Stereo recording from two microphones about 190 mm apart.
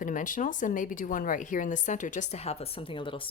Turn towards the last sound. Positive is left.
turn(degrees=25)  # may be behind; listen again after turning